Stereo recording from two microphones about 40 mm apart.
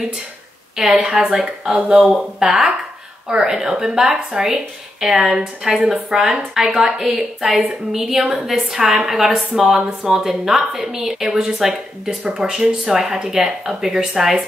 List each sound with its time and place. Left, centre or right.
0.7 s a woman's voice: centre
1.8 s speech: right
2.0 s a woman's voice: centre